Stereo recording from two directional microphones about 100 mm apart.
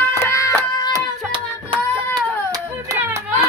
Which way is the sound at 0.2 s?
25° left (ahead or behind).